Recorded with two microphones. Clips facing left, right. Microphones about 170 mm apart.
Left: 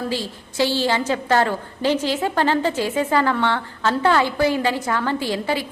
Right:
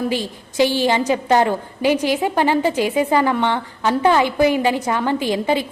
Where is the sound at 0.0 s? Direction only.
15° right (ahead or behind).